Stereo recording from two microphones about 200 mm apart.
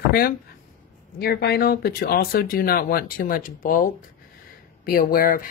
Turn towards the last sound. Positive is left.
turn(degrees=45)  # may be behind; listen again after turning